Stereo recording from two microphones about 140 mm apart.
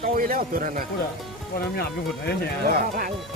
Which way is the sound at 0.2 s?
90° right.